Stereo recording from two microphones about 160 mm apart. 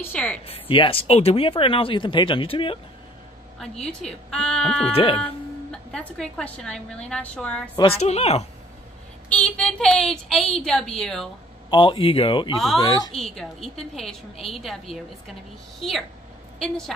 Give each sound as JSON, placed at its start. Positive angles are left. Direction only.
{"t": 0.0, "sound": "speech", "side_deg": 10}
{"t": 0.5, "sound": "speech", "side_deg": 35}
{"t": 3.5, "sound": "a woman's voice", "side_deg": 5}
{"t": 4.8, "sound": "speech", "side_deg": 35}
{"t": 5.7, "sound": "a woman's voice", "side_deg": 5}
{"t": 7.7, "sound": "speech", "side_deg": 35}
{"t": 9.3, "sound": "a woman's voice", "side_deg": 5}
{"t": 11.7, "sound": "a woman's voice", "side_deg": 30}
{"t": 13.1, "sound": "a woman's voice", "side_deg": 0}
{"t": 16.6, "sound": "a woman's voice", "side_deg": 5}